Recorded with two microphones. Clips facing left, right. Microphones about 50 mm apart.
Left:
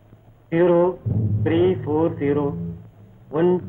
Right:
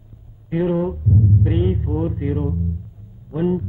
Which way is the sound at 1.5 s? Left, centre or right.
Left.